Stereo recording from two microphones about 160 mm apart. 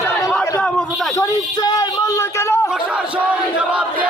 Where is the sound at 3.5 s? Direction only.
5° right (ahead or behind).